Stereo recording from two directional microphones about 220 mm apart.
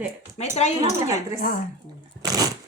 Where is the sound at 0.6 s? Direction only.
30° left (ahead or behind).